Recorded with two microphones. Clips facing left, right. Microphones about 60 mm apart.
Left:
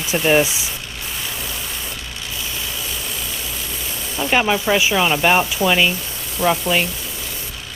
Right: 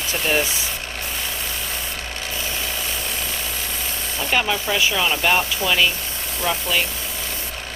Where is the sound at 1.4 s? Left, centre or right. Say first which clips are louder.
Even; right.